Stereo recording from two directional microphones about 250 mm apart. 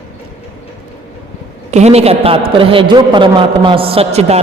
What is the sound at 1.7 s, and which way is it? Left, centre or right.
A man's voice, right.